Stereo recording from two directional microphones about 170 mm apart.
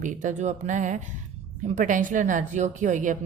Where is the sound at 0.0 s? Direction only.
45° right (ahead or behind).